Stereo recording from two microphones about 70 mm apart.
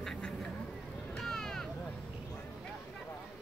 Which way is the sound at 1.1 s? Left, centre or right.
Centre.